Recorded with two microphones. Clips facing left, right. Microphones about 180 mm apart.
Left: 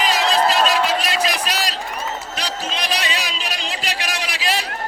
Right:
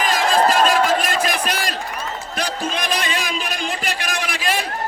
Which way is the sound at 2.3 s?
50° right (ahead or behind).